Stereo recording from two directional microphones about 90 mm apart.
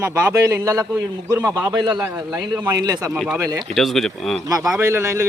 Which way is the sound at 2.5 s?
35° right (ahead or behind).